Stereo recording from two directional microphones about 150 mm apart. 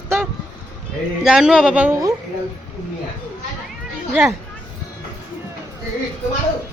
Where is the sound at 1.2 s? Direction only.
5° right (ahead or behind).